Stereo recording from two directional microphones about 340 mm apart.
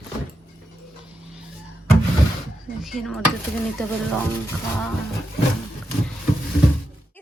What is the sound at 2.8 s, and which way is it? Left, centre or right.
Speech, centre.